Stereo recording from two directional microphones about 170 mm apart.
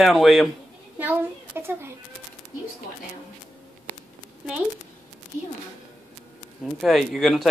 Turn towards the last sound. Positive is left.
turn(degrees=0)  # may be behind; listen again after turning